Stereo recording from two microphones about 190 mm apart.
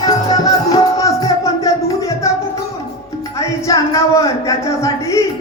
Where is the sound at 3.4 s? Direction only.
15° left (ahead or behind).